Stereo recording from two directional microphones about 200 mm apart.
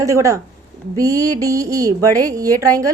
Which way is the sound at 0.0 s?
15° right (ahead or behind).